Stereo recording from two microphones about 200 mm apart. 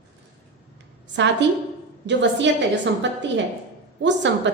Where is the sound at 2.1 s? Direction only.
60° right (ahead or behind).